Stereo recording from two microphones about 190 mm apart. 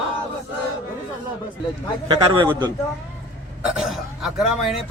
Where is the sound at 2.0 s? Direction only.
25° right (ahead or behind).